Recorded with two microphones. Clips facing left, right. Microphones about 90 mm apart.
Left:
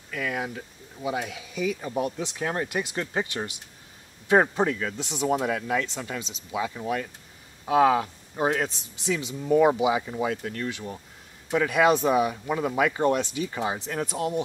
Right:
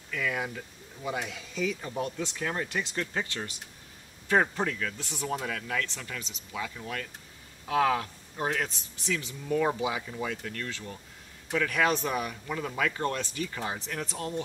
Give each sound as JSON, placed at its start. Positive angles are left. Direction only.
{"t": 1.0, "sound": "speech", "side_deg": 10}
{"t": 2.7, "sound": "speech", "side_deg": 10}
{"t": 3.0, "sound": "speech", "side_deg": 20}